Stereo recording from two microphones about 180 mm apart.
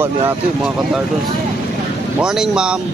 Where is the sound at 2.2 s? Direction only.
5° right (ahead or behind).